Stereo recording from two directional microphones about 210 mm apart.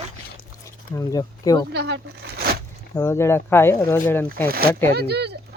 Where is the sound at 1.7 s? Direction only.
55° right (ahead or behind).